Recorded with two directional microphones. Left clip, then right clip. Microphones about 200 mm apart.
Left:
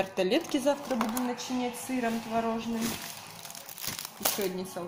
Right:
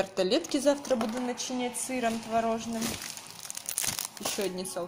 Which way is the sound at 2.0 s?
45° right (ahead or behind).